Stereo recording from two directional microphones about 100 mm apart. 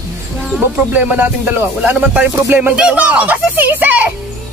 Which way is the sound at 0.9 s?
15° right (ahead or behind).